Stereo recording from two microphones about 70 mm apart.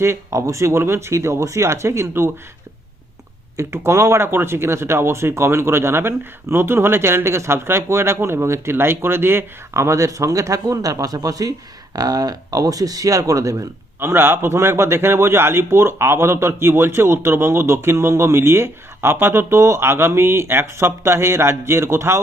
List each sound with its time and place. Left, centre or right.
0.0 s speech: right
3.6 s speech: right
14.0 s speech: right